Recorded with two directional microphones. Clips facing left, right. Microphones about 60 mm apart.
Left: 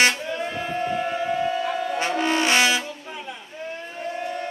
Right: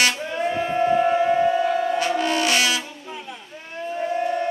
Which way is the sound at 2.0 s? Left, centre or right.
Left.